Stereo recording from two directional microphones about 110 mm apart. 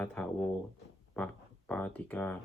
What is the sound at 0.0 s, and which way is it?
Speech, 10° left (ahead or behind).